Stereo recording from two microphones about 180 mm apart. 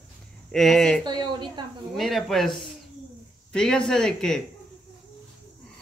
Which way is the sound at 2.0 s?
Centre (ahead or behind).